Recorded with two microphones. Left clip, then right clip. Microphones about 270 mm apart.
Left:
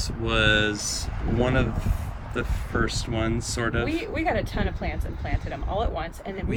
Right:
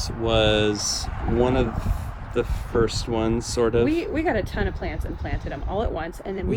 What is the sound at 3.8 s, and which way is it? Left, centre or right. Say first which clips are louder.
Speech: right 3 dB; right.